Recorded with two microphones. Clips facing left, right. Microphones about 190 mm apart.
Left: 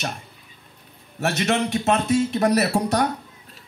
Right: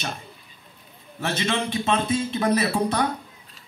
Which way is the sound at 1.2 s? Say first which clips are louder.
Left 4 dB; 70° left (ahead or behind).